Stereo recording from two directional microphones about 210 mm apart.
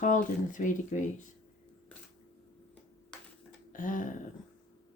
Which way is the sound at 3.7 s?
40° left (ahead or behind).